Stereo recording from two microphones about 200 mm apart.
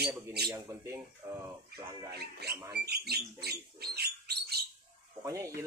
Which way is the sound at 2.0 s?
55° right (ahead or behind).